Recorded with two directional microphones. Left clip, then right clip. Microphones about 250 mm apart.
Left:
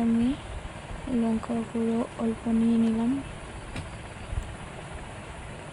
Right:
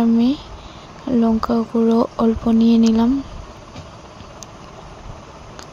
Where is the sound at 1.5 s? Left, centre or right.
Right.